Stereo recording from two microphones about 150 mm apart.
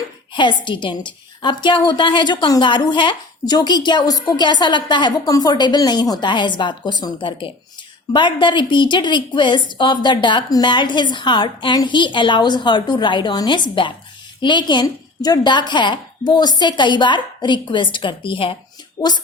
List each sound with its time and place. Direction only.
0.3 s a woman's voice: 30° left (ahead or behind)